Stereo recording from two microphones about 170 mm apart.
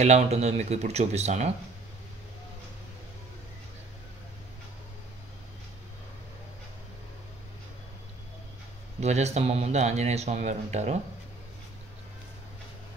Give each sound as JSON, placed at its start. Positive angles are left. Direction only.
{"t": 0.0, "sound": "speech", "side_deg": -40}
{"t": 9.0, "sound": "speech", "side_deg": -40}